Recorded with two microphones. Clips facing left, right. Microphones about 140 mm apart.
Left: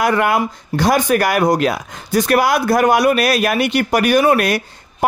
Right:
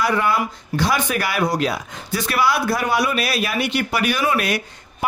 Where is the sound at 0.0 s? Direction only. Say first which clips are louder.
Left 4 dB; 55° left (ahead or behind).